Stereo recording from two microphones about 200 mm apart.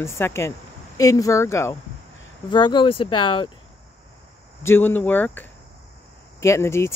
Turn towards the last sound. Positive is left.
turn(degrees=15)  # may be behind; listen again after turning